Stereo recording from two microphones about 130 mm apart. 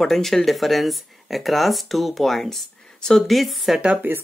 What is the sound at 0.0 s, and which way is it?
Speech, centre (ahead or behind).